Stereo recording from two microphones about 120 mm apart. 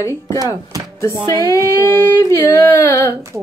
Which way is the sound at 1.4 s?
25° left (ahead or behind).